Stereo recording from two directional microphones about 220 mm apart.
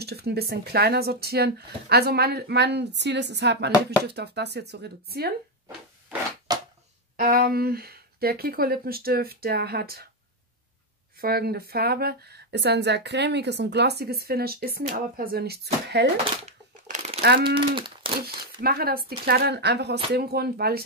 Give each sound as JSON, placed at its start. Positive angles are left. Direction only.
{"t": 0.0, "sound": "speech", "side_deg": -45}
{"t": 6.5, "sound": "a sound", "side_deg": -15}
{"t": 7.2, "sound": "speech", "side_deg": -40}
{"t": 11.1, "sound": "speech", "side_deg": -45}
{"t": 16.4, "sound": "a sound", "side_deg": -30}
{"t": 18.6, "sound": "speech", "side_deg": -45}